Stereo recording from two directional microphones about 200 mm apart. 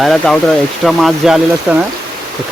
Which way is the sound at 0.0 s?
Centre (ahead or behind).